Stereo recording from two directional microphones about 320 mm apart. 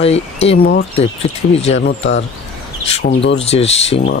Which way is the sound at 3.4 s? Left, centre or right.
Centre.